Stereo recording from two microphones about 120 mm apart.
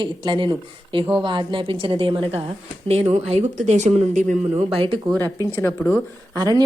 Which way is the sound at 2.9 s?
65° right (ahead or behind).